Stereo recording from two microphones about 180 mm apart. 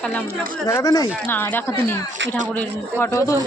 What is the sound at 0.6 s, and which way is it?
A woman's voice, 20° left (ahead or behind).